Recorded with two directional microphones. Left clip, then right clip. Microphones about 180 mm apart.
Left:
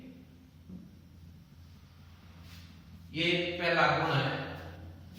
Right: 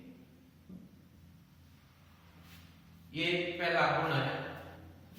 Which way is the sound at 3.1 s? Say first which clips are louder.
Left 3 dB; centre (ahead or behind).